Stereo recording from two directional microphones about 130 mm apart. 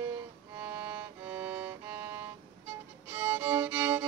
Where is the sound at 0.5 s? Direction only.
20° right (ahead or behind).